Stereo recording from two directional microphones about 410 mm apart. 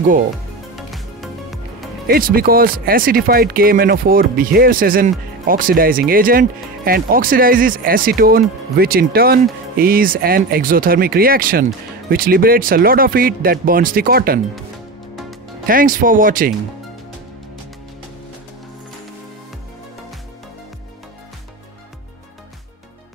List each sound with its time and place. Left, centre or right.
0.7 s music: centre
2.0 s speech: right
15.6 s speech: centre